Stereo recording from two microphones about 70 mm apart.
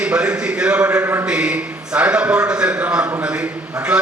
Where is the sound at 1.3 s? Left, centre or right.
Centre.